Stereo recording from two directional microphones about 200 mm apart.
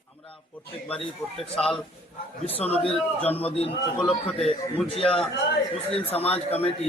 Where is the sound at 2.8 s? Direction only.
30° left (ahead or behind).